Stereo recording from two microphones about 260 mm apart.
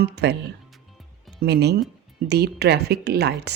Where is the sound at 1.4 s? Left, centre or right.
Right.